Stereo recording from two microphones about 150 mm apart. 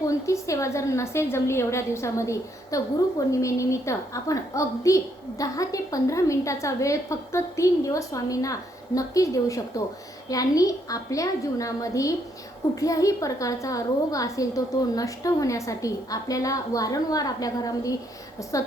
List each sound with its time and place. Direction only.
0.0 s a woman's voice: 20° left (ahead or behind)